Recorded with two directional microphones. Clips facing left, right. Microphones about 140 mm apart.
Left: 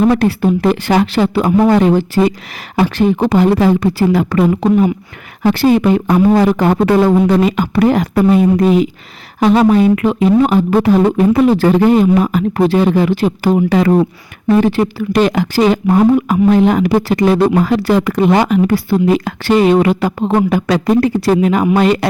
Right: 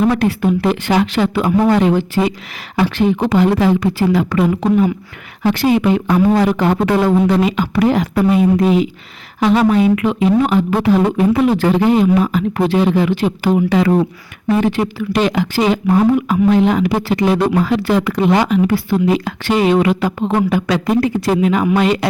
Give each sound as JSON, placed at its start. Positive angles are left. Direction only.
{"t": 0.0, "sound": "speech", "side_deg": 35}